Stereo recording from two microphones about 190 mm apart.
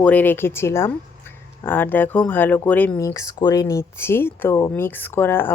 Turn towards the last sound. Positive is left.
turn(degrees=10)  # may be behind; listen again after turning